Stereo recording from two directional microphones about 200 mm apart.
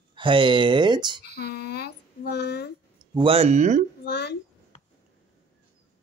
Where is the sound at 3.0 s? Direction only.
25° right (ahead or behind).